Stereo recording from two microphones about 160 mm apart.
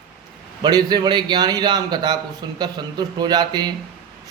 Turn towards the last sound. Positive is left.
turn(degrees=-25)  # may be behind; listen again after turning